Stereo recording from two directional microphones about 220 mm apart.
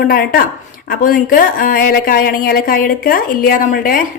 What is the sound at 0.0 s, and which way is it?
A woman's voice, 40° left (ahead or behind).